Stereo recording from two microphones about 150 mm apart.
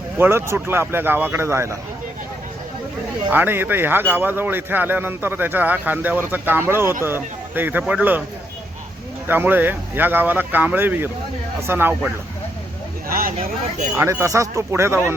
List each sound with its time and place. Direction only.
0.2 s speech: 15° right (ahead or behind)
3.2 s speech: 15° right (ahead or behind)
9.2 s speech: 15° right (ahead or behind)
13.1 s speech: 75° right (ahead or behind)
13.9 s speech: 15° right (ahead or behind)